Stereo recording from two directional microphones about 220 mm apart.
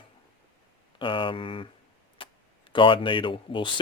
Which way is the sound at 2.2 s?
25° left (ahead or behind).